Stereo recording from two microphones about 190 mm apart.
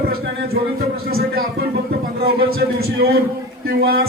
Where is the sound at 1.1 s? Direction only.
55° right (ahead or behind).